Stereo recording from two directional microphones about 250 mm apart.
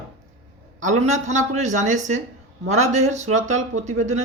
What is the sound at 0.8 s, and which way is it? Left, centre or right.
Speech, right.